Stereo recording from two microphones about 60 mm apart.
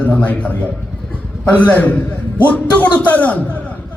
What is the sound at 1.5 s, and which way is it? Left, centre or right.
A man's voice, left.